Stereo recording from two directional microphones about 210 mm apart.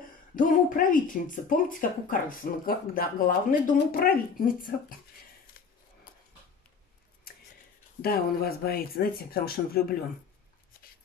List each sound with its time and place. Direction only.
0.4 s speech: 40° left (ahead or behind)
5.5 s a sound: 45° left (ahead or behind)
8.0 s speech: 45° left (ahead or behind)